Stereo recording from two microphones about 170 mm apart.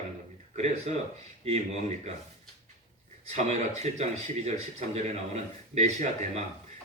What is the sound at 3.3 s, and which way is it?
A man's voice, 40° right (ahead or behind).